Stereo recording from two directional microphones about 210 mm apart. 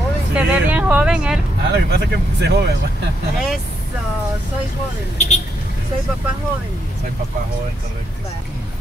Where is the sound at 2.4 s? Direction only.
50° right (ahead or behind).